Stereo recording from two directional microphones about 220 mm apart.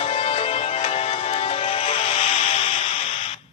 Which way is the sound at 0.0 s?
30° left (ahead or behind).